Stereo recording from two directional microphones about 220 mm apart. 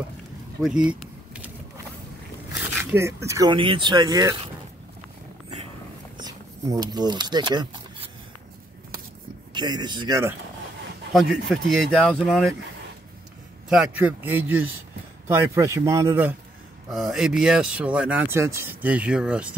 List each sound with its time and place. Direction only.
0.6 s a sound: 5° right (ahead or behind)
2.7 s speech: 10° right (ahead or behind)
6.1 s a sound: 15° right (ahead or behind)
9.5 s speech: 20° right (ahead or behind)
11.1 s speech: centre (ahead or behind)
13.7 s speech: 5° right (ahead or behind)